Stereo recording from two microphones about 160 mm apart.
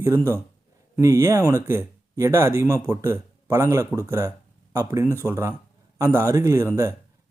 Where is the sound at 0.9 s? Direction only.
20° right (ahead or behind).